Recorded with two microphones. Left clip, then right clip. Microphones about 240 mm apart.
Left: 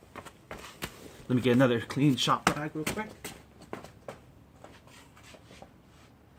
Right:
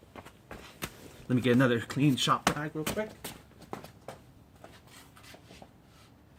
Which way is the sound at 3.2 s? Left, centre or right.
Right.